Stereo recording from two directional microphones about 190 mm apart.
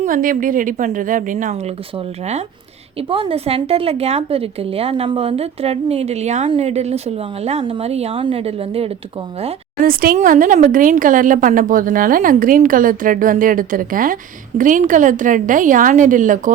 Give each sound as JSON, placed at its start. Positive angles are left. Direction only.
{"t": 0.0, "sound": "speech", "side_deg": -45}
{"t": 3.1, "sound": "a woman's voice", "side_deg": -30}
{"t": 9.8, "sound": "speech", "side_deg": -50}